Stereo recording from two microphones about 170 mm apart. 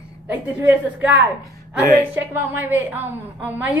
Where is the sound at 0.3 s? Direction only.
10° right (ahead or behind).